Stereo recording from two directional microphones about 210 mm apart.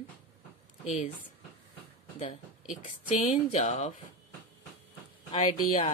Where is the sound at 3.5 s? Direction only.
30° left (ahead or behind).